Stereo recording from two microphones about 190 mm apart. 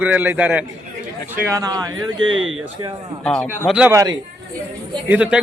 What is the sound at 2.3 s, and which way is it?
Speech, 90° right.